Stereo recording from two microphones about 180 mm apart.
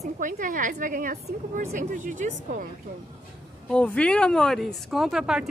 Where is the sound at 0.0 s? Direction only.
45° right (ahead or behind).